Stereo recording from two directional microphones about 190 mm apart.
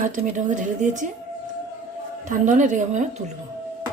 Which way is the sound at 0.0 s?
45° right (ahead or behind).